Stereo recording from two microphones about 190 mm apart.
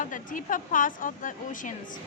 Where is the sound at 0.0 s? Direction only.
45° left (ahead or behind).